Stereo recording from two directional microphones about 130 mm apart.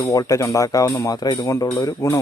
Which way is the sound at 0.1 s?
25° left (ahead or behind).